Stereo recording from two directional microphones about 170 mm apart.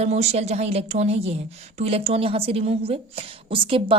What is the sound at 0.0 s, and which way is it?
A woman's voice, 40° right (ahead or behind).